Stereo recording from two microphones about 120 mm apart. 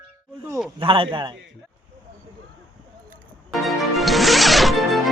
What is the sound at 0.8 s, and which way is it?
Speech, 45° right (ahead or behind).